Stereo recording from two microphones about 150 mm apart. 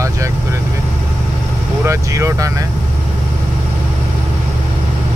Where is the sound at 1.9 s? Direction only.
20° right (ahead or behind).